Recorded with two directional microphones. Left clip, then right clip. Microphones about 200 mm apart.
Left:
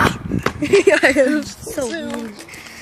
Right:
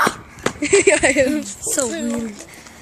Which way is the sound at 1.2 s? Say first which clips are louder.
Left 2 dB; 10° left (ahead or behind).